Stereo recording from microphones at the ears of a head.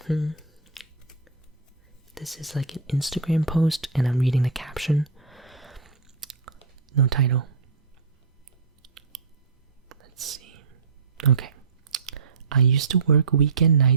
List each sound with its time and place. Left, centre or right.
0.1 s a sound: centre
2.1 s speech: centre
6.9 s speech: right
9.9 s whispering: right
11.2 s speech: right